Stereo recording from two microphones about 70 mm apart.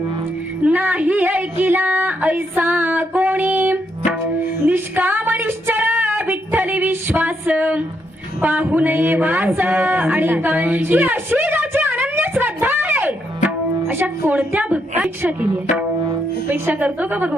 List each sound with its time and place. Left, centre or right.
0.6 s speech: right
4.7 s music: right
8.4 s a sound: right
13.8 s speech: right
16.5 s speech: right